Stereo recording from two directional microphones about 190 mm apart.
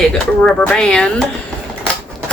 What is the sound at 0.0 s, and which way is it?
A woman's voice, 5° left (ahead or behind).